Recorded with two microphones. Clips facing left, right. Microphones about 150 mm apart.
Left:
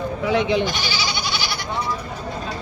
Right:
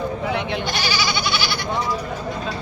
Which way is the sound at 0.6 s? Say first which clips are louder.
Right 1 dB; 65° right (ahead or behind).